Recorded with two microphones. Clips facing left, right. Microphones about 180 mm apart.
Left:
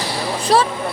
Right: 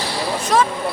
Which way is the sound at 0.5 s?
35° left (ahead or behind).